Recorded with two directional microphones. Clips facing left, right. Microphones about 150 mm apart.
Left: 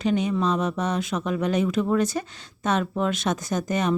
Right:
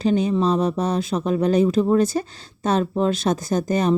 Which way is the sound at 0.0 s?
35° right (ahead or behind).